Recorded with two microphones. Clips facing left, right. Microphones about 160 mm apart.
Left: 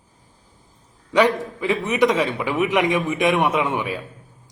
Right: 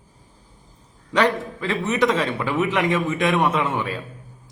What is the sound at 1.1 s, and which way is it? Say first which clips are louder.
A man's voice: left 2 dB; 10° left (ahead or behind).